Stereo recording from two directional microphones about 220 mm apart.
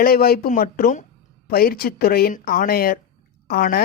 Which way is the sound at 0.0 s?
45° left (ahead or behind).